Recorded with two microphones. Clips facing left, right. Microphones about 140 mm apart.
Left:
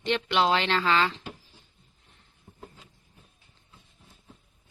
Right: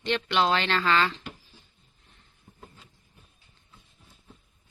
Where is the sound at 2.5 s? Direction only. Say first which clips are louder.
Left 2 dB; 30° left (ahead or behind).